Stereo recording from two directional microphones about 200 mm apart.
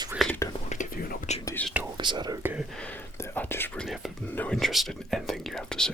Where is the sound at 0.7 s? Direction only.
40° left (ahead or behind).